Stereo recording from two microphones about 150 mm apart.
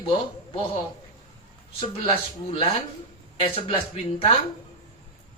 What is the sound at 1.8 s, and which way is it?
Speech, 40° left (ahead or behind).